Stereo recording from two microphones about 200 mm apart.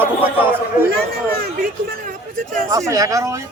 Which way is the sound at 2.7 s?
15° right (ahead or behind).